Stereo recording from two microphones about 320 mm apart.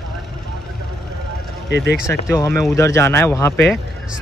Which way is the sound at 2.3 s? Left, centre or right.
Centre.